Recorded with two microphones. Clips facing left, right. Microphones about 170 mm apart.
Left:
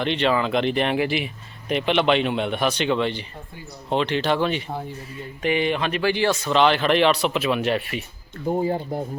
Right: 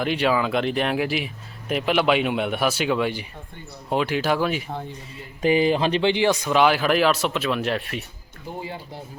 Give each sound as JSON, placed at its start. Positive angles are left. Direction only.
{"t": 0.0, "sound": "speech", "side_deg": -5}
{"t": 5.4, "sound": "speech", "side_deg": -35}
{"t": 8.4, "sound": "speech", "side_deg": 40}